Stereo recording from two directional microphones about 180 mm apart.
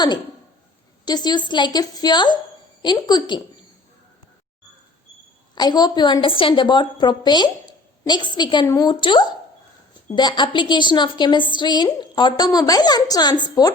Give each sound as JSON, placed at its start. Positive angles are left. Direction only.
{"t": 1.0, "sound": "a woman's voice", "side_deg": 25}
{"t": 5.5, "sound": "a woman's voice", "side_deg": 25}